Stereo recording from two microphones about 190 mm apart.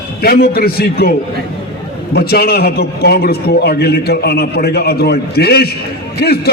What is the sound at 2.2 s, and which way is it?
A man's voice, 55° left (ahead or behind).